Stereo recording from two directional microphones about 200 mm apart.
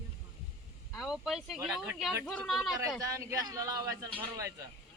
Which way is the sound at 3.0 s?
15° right (ahead or behind).